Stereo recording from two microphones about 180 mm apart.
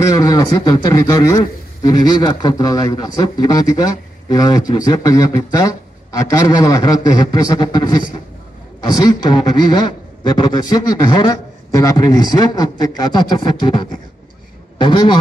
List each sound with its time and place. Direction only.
0.1 s a man's voice: 20° left (ahead or behind)